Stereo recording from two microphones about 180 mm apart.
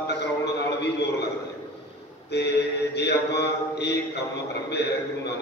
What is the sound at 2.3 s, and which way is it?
A man's voice, 70° left (ahead or behind).